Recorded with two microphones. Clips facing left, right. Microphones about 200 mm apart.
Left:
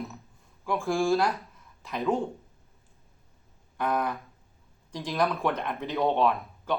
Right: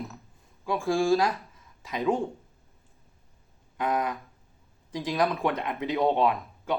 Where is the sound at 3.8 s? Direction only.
15° right (ahead or behind).